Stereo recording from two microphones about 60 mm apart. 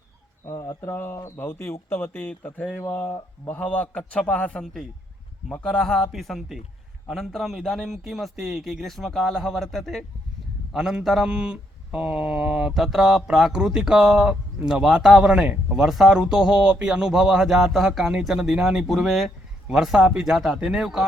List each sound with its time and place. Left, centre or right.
0.4 s speech: left
0.9 s speech: left
2.6 s a man's voice: left
3.1 s speech: left
3.6 s a man's voice: centre
5.6 s a man's voice: centre
10.8 s a man's voice: centre